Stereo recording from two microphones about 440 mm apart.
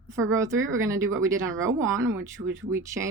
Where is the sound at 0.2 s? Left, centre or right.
Centre.